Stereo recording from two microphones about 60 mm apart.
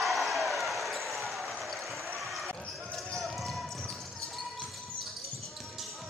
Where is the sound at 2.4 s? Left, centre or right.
Centre.